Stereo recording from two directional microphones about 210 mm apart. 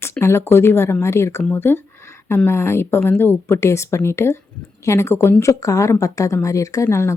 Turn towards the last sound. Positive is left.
turn(degrees=10)  # may be behind; listen again after turning